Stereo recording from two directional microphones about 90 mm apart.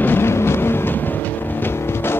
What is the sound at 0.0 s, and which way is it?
Vehicle, 25° left (ahead or behind).